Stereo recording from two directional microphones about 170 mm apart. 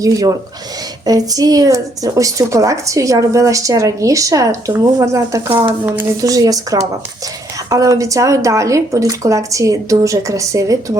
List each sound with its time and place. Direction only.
0.0 s speech: 20° right (ahead or behind)